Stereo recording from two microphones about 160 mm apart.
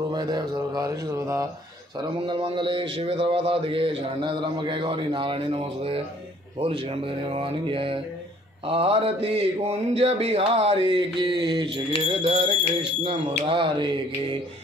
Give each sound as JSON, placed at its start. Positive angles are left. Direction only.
{"t": 0.1, "sound": "speech", "side_deg": -25}
{"t": 2.0, "sound": "mantra", "side_deg": -30}